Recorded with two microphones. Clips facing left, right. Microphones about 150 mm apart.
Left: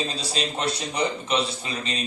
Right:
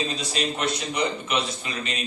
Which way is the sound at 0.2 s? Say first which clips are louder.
Right 1 dB; 30° left (ahead or behind).